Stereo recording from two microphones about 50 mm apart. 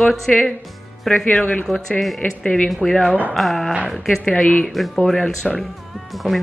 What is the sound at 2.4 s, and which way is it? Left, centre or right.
Speech, centre.